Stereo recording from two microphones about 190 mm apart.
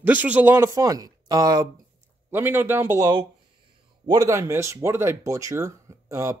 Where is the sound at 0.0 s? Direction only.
10° right (ahead or behind).